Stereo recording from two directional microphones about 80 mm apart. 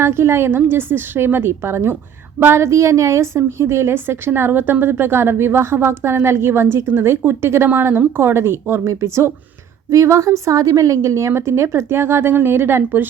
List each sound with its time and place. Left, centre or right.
0.0 s a woman's voice: right